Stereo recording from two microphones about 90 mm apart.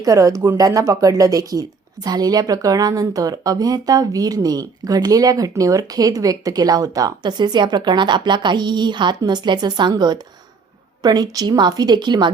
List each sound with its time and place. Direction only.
0.0 s speech: 40° right (ahead or behind); by 12.3 s 55° right (ahead or behind)